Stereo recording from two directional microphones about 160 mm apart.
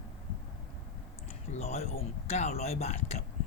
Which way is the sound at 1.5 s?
45° left (ahead or behind).